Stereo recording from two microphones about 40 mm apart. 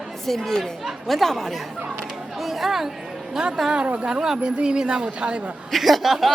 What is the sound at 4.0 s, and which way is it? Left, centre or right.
Speech, centre.